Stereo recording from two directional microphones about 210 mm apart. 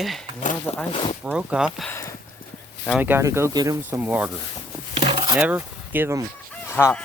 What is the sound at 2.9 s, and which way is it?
Speech, 10° right (ahead or behind).